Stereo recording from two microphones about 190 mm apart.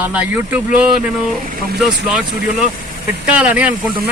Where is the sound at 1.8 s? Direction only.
5° right (ahead or behind).